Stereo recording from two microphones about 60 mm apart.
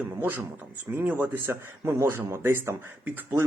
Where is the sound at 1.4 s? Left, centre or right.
Right.